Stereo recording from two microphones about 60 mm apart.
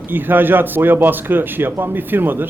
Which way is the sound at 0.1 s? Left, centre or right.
Right.